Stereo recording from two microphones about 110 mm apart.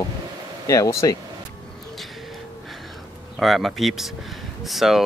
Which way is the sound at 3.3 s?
Centre (ahead or behind).